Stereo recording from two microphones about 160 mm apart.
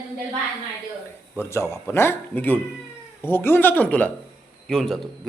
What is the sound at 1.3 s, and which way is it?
A man's voice, 15° left (ahead or behind).